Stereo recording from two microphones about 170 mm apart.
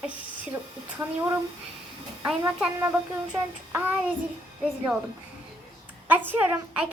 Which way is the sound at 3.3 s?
10° right (ahead or behind).